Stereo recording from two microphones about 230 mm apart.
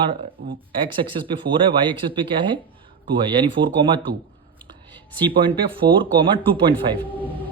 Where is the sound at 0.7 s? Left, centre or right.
Right.